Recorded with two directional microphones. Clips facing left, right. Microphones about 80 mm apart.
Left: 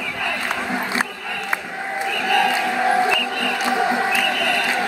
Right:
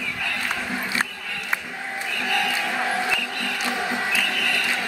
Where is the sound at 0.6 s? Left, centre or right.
Left.